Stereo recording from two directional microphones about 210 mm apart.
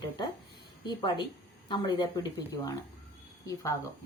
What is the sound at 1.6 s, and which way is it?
Speech, 20° left (ahead or behind).